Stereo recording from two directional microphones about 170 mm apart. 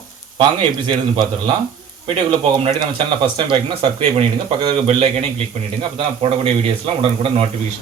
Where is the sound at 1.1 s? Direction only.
30° right (ahead or behind).